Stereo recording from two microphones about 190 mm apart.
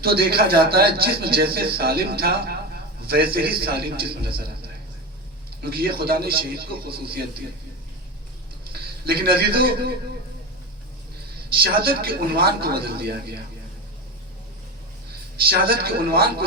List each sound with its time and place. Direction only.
0.0 s a man's voice: 55° right (ahead or behind)
5.6 s speech: 55° right (ahead or behind)
8.7 s a man's voice: 55° right (ahead or behind)
11.5 s speech: 55° right (ahead or behind)
15.4 s a man's voice: 55° right (ahead or behind)